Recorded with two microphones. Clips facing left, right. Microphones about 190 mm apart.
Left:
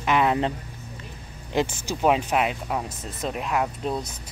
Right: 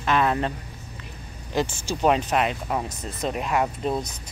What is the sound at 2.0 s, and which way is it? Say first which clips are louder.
Speech: even; 5° left (ahead or behind).